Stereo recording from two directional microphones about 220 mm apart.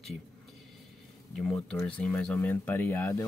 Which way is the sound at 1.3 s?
Centre (ahead or behind).